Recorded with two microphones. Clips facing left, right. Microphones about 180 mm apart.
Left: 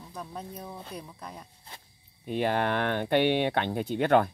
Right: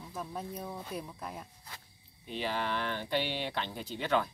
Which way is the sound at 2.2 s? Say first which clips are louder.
Left 8 dB; 55° left (ahead or behind).